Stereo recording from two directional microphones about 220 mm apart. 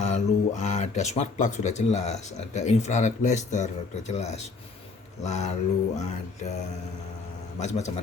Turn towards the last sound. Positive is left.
turn(degrees=30)  # may be behind; listen again after turning